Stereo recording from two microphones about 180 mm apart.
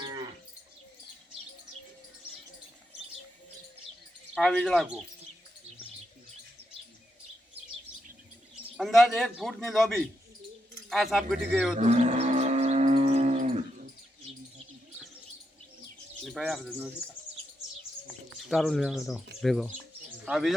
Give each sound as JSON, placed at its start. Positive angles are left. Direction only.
{"t": 4.4, "sound": "speech", "side_deg": 5}
{"t": 8.7, "sound": "speech", "side_deg": 0}
{"t": 11.8, "sound": "livestock", "side_deg": -40}
{"t": 16.2, "sound": "speech", "side_deg": 0}
{"t": 18.1, "sound": "speech", "side_deg": 0}